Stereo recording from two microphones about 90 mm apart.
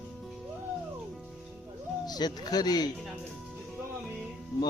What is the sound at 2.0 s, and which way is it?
Speech, 50° left (ahead or behind).